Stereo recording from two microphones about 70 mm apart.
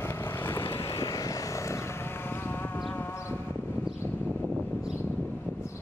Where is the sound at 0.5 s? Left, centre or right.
Left.